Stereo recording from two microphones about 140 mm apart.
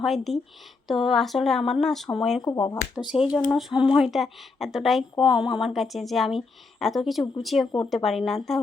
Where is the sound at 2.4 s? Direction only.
30° left (ahead or behind).